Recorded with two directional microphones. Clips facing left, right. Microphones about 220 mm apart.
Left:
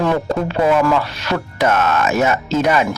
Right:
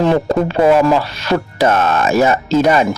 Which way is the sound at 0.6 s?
30° right (ahead or behind).